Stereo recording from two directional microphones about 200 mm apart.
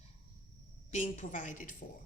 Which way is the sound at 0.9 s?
40° left (ahead or behind).